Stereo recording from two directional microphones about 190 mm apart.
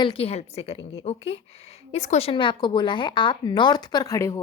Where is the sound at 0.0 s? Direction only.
30° left (ahead or behind).